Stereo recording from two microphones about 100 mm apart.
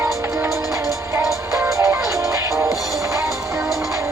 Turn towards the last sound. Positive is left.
turn(degrees=-30)  # may be behind; listen again after turning